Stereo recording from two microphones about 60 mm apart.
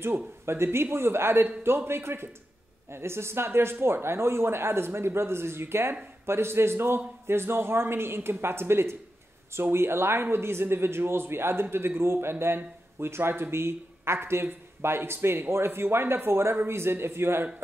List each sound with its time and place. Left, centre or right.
0.0 s a man's voice: right